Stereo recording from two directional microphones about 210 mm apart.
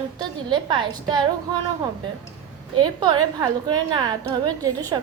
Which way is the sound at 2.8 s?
20° right (ahead or behind).